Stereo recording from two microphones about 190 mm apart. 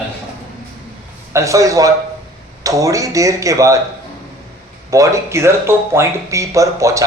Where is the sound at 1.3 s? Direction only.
15° right (ahead or behind).